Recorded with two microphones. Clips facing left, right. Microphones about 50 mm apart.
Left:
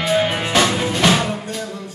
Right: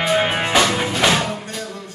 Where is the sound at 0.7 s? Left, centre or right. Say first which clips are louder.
Left 1 dB; centre.